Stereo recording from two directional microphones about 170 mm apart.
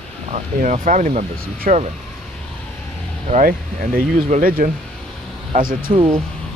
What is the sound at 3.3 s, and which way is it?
Speech, 55° right (ahead or behind).